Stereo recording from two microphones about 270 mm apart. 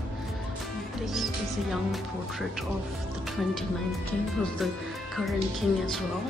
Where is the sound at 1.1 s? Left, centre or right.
Centre.